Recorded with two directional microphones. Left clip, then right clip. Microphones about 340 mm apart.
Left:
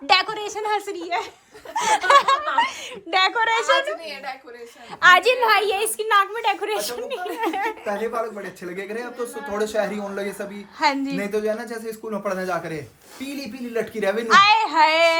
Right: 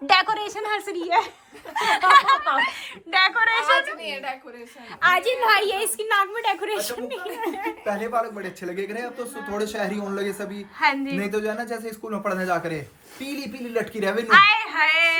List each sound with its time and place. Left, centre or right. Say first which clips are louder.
0.1 s a woman's voice: even; centre
5.1 s a woman's voice: left 6 dB; centre
5.4 s speech: left 1 dB; centre
8.6 s a woman's voice: right 1 dB; centre